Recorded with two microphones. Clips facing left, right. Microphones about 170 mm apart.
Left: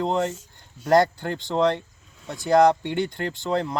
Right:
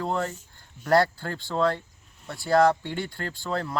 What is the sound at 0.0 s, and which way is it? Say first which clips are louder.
Speech: left 4 dB; 20° left (ahead or behind).